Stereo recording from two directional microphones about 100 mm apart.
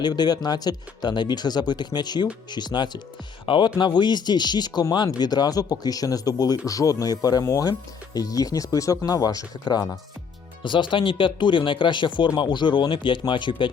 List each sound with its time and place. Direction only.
0.0 s speech: 45° left (ahead or behind)
10.6 s speech: 50° left (ahead or behind)